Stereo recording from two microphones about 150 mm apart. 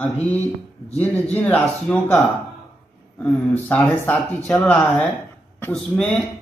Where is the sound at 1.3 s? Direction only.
10° left (ahead or behind).